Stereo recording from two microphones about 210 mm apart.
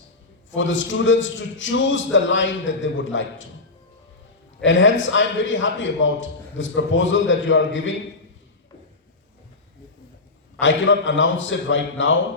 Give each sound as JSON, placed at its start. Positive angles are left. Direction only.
{"t": 0.5, "sound": "a man's voice", "side_deg": 65}
{"t": 4.6, "sound": "a man's voice", "side_deg": 65}
{"t": 10.6, "sound": "a man's voice", "side_deg": 60}